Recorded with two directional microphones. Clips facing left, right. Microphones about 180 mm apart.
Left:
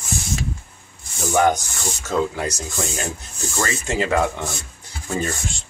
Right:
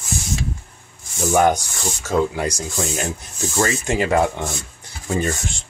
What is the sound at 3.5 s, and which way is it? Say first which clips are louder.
Speech: right 3 dB; 15° right (ahead or behind).